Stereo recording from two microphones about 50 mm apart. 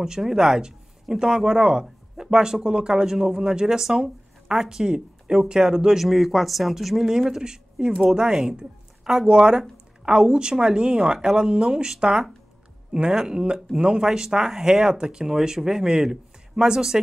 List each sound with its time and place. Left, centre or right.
0.0 s speech: centre